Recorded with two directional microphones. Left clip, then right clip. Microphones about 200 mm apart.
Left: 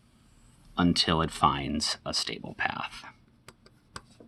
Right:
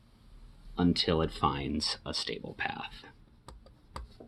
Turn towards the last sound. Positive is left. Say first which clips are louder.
# left 5 dB
turn(degrees=50)  # may be behind; listen again after turning